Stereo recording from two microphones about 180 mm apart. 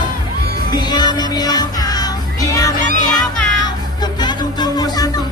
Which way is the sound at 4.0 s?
25° left (ahead or behind).